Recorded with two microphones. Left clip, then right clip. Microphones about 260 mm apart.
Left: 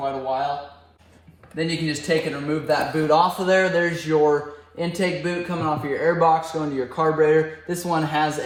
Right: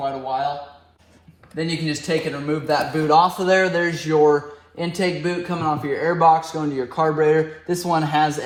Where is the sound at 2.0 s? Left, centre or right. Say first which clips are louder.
Left 1 dB; centre.